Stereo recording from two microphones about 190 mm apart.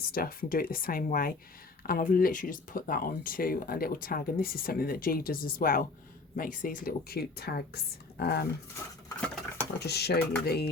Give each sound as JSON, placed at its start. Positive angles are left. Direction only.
{"t": 0.1, "sound": "speech", "side_deg": 50}
{"t": 9.2, "sound": "stir", "side_deg": 5}
{"t": 9.8, "sound": "speech", "side_deg": 55}